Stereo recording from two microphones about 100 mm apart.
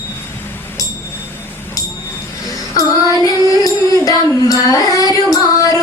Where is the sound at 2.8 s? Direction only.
35° left (ahead or behind).